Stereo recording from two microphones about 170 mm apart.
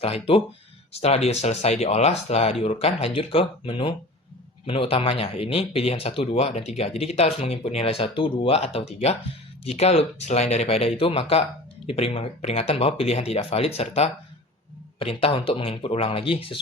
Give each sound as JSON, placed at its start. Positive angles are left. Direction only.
{"t": 0.0, "sound": "speech", "side_deg": 35}